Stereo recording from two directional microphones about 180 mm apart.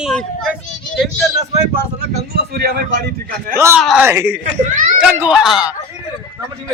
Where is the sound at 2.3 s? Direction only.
60° right (ahead or behind).